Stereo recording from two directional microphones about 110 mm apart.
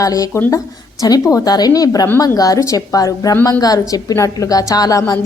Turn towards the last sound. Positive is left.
turn(degrees=30)  # may be behind; listen again after turning